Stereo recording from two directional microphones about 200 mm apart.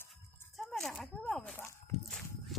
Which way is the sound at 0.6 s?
Centre (ahead or behind).